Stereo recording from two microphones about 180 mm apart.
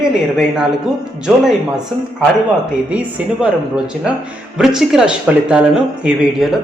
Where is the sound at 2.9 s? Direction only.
5° right (ahead or behind).